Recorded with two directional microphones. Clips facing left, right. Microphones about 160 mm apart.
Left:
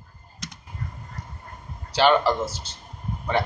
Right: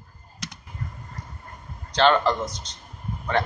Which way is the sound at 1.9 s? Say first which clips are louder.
Even; 5° left (ahead or behind).